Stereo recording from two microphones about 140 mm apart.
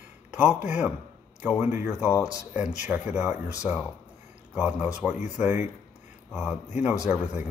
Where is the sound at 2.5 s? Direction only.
10° right (ahead or behind).